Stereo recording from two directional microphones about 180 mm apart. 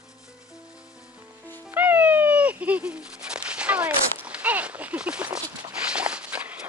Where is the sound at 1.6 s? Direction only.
10° right (ahead or behind).